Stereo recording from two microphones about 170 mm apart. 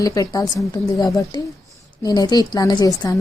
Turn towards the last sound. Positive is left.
turn(degrees=20)  # may be behind; listen again after turning